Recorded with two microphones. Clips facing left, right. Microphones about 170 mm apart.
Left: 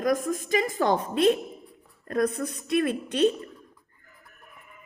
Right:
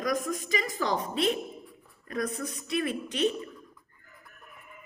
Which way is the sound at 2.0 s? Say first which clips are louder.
Left 6 dB; 55° left (ahead or behind).